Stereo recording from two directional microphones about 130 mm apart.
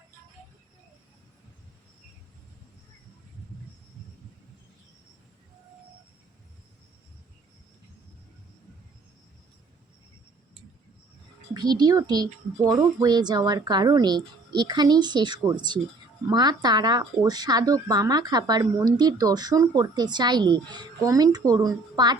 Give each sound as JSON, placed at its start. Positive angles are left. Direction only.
{"t": 11.5, "sound": "speech", "side_deg": -30}